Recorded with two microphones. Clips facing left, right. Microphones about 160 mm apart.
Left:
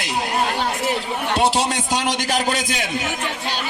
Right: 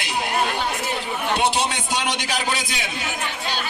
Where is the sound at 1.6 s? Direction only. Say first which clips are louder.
Left 3 dB; 45° left (ahead or behind).